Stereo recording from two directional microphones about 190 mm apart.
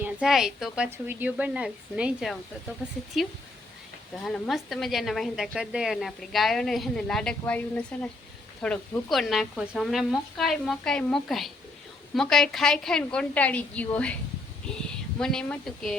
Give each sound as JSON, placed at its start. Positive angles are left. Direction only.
{"t": 0.0, "sound": "a woman's voice", "side_deg": -5}
{"t": 15.2, "sound": "speech", "side_deg": 5}